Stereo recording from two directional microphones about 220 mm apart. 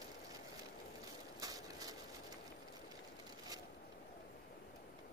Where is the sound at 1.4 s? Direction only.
15° right (ahead or behind).